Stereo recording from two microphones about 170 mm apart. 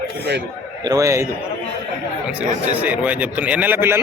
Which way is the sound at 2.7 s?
10° right (ahead or behind).